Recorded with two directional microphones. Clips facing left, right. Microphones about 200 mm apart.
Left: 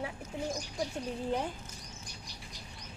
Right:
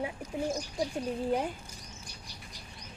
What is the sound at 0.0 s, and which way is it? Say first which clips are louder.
Bird: right 4 dB; 15° right (ahead or behind).